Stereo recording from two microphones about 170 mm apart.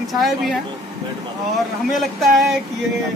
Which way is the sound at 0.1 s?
Centre (ahead or behind).